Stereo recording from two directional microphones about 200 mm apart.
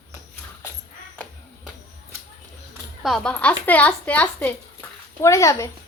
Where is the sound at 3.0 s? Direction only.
Centre (ahead or behind).